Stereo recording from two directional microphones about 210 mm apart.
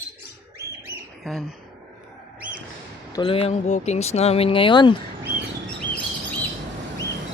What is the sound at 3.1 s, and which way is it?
Speech, 25° left (ahead or behind).